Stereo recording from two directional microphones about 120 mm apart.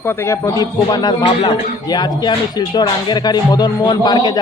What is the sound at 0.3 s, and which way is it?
Speech, 30° left (ahead or behind).